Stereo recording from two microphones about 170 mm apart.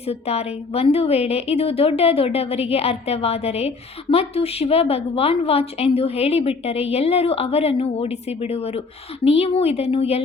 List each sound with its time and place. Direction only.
0.0 s a woman's voice: 35° left (ahead or behind)